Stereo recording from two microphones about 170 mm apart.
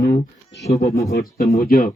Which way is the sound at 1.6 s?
60° left (ahead or behind).